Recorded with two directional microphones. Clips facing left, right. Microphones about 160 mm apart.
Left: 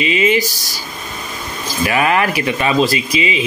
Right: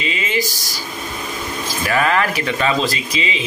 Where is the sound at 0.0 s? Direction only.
15° left (ahead or behind).